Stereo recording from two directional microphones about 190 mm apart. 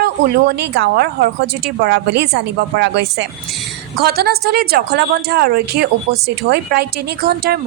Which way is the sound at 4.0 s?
55° right (ahead or behind).